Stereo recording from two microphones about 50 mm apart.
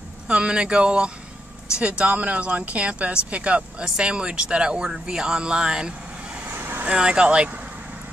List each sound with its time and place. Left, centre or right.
0.3 s speech: centre
6.5 s vehicle: right
6.9 s speech: centre